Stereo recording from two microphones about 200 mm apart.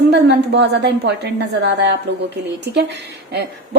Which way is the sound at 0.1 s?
60° right (ahead or behind).